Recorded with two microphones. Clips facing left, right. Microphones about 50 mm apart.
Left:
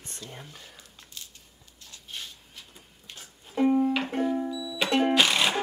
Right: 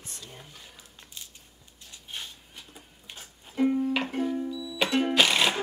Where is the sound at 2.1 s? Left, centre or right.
Right.